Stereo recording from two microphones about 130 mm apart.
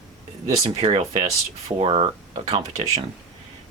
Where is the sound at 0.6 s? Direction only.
40° right (ahead or behind).